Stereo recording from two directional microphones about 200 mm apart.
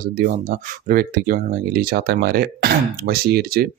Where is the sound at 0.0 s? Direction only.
45° right (ahead or behind).